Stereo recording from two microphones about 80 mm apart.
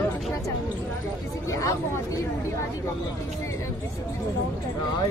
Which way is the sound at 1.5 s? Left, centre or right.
Left.